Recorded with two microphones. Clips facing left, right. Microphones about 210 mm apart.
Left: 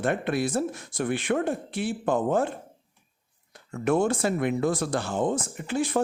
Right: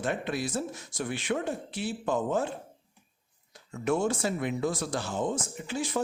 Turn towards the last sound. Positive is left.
turn(degrees=55)  # may be behind; listen again after turning